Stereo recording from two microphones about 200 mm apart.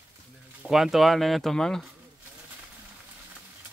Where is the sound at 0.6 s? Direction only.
Centre (ahead or behind).